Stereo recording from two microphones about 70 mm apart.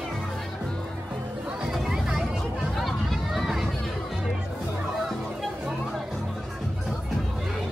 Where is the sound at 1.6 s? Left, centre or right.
Centre.